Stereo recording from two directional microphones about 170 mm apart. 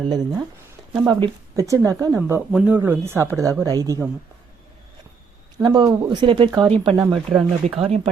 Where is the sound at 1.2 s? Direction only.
20° right (ahead or behind).